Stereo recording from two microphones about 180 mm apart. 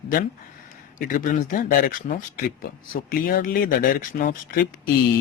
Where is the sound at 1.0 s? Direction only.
50° left (ahead or behind).